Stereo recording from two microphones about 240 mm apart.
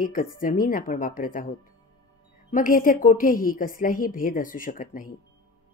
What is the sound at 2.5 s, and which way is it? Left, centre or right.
A woman's voice, left.